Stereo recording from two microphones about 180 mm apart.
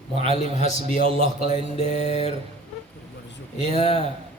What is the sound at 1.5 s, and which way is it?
Speech, 40° left (ahead or behind).